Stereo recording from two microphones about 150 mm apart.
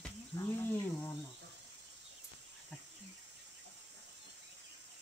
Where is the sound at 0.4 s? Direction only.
20° left (ahead or behind).